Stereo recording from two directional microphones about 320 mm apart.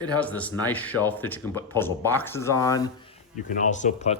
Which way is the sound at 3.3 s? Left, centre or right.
Left.